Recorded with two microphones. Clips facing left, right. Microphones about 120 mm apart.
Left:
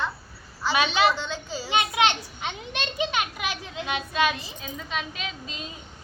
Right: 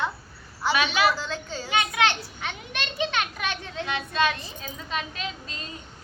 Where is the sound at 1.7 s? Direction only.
25° left (ahead or behind); by 3.8 s 10° left (ahead or behind).